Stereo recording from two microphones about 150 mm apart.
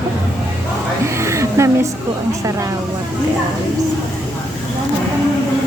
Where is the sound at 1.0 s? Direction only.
20° right (ahead or behind).